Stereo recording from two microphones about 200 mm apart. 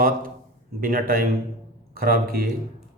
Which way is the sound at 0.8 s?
45° right (ahead or behind).